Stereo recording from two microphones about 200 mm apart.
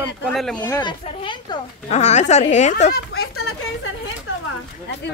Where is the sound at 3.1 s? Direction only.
90° left.